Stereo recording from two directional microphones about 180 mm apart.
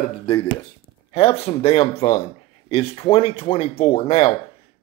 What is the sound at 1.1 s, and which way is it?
Speech, 35° left (ahead or behind).